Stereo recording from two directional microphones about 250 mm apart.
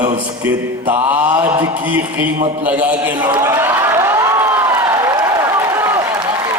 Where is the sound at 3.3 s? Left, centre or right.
Centre.